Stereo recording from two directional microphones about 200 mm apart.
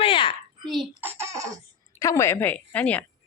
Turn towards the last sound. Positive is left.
turn(degrees=5)  # may be behind; listen again after turning